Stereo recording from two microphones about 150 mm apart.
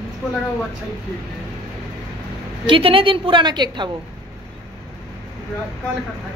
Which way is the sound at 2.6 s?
35° right (ahead or behind).